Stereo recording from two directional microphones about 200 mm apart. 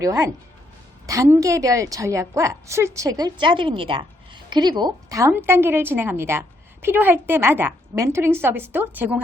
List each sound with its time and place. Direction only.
0.0 s a woman's voice: 15° right (ahead or behind)